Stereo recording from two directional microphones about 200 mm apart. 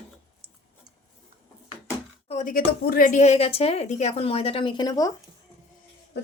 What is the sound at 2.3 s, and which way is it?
A woman's voice, 40° left (ahead or behind).